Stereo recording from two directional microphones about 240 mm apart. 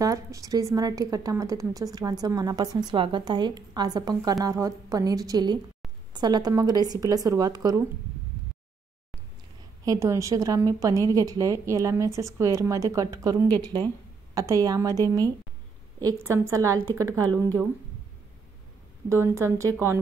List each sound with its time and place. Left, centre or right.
0.0 s a woman's voice: centre
9.8 s a woman's voice: centre
19.0 s a woman's voice: centre